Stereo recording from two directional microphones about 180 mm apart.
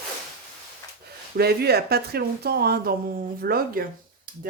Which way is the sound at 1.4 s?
60° right (ahead or behind).